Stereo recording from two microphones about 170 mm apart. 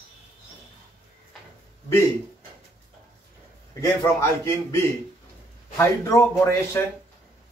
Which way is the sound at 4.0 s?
15° left (ahead or behind).